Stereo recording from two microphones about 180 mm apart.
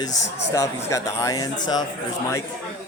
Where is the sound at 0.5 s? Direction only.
15° left (ahead or behind).